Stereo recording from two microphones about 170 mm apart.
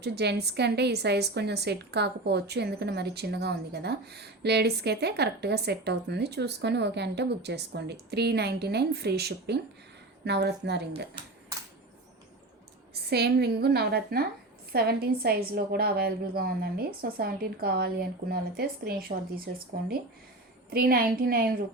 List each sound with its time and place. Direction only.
0.0 s a woman's voice: 75° right (ahead or behind)
12.9 s a woman's voice: 70° right (ahead or behind)
20.7 s a woman's voice: 60° right (ahead or behind)